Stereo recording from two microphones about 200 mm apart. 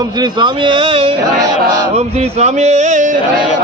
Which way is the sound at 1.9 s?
30° right (ahead or behind).